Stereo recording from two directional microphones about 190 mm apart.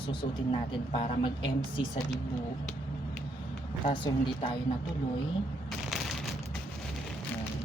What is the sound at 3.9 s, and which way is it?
Speech, 25° left (ahead or behind).